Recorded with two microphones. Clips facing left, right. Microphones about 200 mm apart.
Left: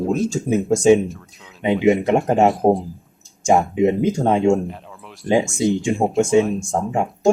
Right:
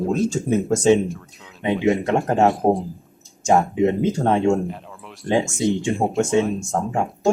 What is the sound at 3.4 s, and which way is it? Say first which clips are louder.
Speech: left 1 dB; 15° left (ahead or behind).